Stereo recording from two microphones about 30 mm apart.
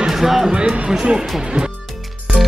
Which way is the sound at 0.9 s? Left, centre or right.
Right.